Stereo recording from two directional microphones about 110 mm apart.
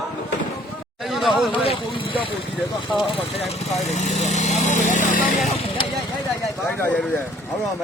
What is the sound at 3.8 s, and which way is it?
Speech, 90° left.